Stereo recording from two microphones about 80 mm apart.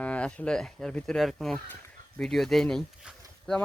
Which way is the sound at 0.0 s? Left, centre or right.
Centre.